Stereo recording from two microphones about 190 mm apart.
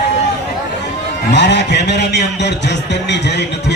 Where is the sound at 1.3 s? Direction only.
65° left (ahead or behind).